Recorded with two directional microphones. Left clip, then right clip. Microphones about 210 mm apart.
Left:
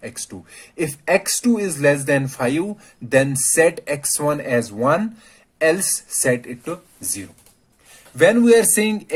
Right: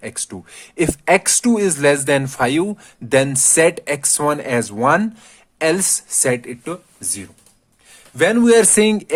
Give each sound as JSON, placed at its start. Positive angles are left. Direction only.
{"t": 0.0, "sound": "speech", "side_deg": -35}